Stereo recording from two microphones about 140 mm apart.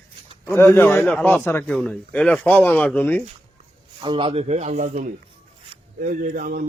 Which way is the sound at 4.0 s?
35° right (ahead or behind).